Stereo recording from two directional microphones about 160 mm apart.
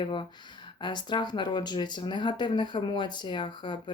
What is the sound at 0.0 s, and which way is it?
Speech, 30° left (ahead or behind).